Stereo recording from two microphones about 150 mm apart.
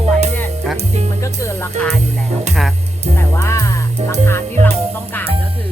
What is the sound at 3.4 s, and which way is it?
Music, 20° left (ahead or behind).